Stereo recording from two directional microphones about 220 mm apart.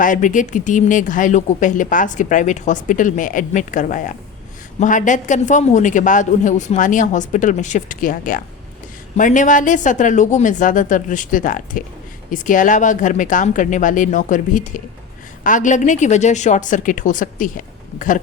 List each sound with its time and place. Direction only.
0.0 s a woman's voice: 35° left (ahead or behind)